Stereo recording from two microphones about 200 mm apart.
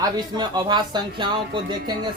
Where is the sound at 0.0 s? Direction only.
20° right (ahead or behind).